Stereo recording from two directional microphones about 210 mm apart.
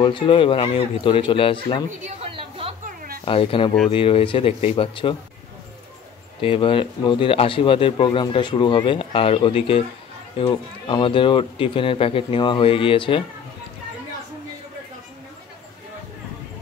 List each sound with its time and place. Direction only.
0.0 s speech: 25° left (ahead or behind)
2.0 s a sound: 30° right (ahead or behind)
3.3 s speech: 25° left (ahead or behind)
6.4 s speech: 25° left (ahead or behind)